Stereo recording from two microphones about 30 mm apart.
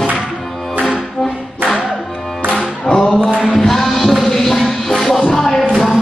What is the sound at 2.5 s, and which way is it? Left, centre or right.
Music, left.